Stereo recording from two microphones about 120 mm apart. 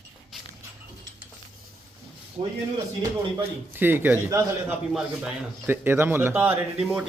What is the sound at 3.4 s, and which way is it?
A man's voice, 20° right (ahead or behind).